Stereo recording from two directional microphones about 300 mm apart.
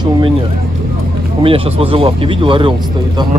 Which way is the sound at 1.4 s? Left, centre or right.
Centre.